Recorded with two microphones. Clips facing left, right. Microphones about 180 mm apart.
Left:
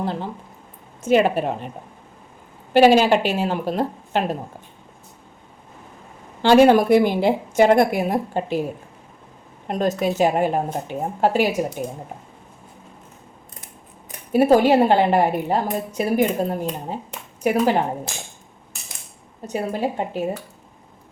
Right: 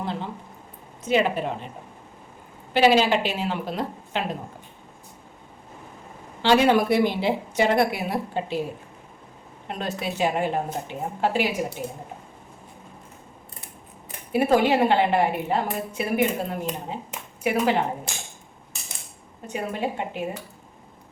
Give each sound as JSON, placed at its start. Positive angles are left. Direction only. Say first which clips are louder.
{"t": 1.0, "sound": "a woman's voice", "louder": "left 5 dB", "side_deg": 45}
{"t": 2.7, "sound": "a woman's voice", "louder": "left 5 dB", "side_deg": 45}
{"t": 6.4, "sound": "a woman's voice", "louder": "left 6 dB", "side_deg": 50}
{"t": 9.6, "sound": "a woman's voice", "louder": "left 8 dB", "side_deg": 40}
{"t": 14.3, "sound": "a woman's voice", "louder": "left 5 dB", "side_deg": 40}
{"t": 19.5, "sound": "a woman's voice", "louder": "left 4 dB", "side_deg": 35}